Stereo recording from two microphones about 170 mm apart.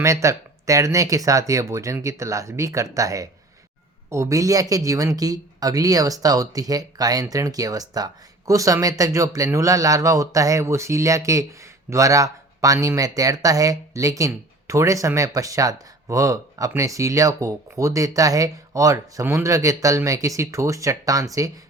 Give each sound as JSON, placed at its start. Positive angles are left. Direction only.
{"t": 0.0, "sound": "speech", "side_deg": -20}